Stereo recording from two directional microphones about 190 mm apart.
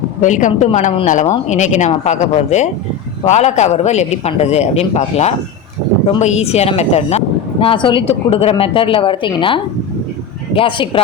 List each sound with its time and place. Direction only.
0.2 s a man's voice: 40° left (ahead or behind); by 11.0 s 25° left (ahead or behind)